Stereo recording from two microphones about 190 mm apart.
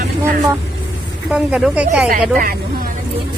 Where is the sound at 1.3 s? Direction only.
5° right (ahead or behind).